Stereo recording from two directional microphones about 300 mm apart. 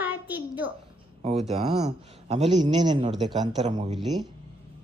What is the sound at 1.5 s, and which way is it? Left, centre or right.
A child's voice, right.